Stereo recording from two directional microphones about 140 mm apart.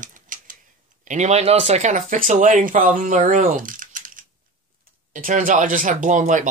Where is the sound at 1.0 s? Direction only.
55° right (ahead or behind).